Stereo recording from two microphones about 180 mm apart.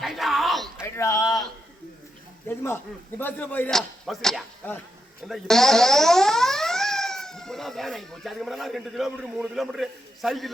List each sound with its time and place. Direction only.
0.0 s bellow: centre (ahead or behind)
0.8 s a sound: 15° left (ahead or behind)
2.5 s speech: 15° left (ahead or behind)